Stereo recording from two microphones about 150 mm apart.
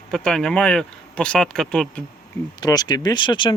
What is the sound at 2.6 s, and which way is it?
Speech, 25° left (ahead or behind).